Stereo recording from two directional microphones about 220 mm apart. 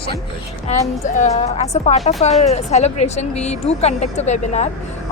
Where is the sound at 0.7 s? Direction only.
30° left (ahead or behind).